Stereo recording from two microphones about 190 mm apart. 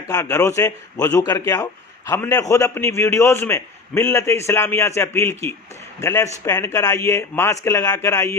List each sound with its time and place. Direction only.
0.1 s a man's voice: 15° left (ahead or behind)